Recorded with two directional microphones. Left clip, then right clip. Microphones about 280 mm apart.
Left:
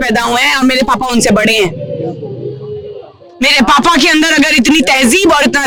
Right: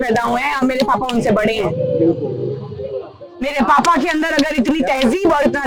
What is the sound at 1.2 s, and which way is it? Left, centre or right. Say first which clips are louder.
Speech: left 5 dB; left.